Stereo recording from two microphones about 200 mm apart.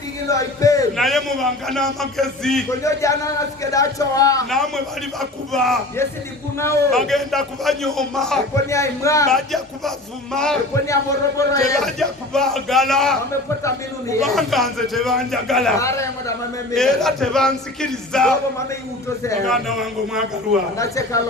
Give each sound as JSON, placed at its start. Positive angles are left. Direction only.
{"t": 0.3, "sound": "a man's voice", "side_deg": 15}
{"t": 0.9, "sound": "a man's voice", "side_deg": 0}
{"t": 2.6, "sound": "speech", "side_deg": 15}
{"t": 4.4, "sound": "a man's voice", "side_deg": 0}
{"t": 6.9, "sound": "a man's voice", "side_deg": 0}
{"t": 8.7, "sound": "speech", "side_deg": 15}
{"t": 9.3, "sound": "a man's voice", "side_deg": 0}
{"t": 10.8, "sound": "speech", "side_deg": 15}
{"t": 11.8, "sound": "a man's voice", "side_deg": 0}
{"t": 14.2, "sound": "a man's voice", "side_deg": 0}
{"t": 15.8, "sound": "speech", "side_deg": 15}
{"t": 16.7, "sound": "a man's voice", "side_deg": 0}
{"t": 19.5, "sound": "a man's voice", "side_deg": 0}
{"t": 20.7, "sound": "speech", "side_deg": 15}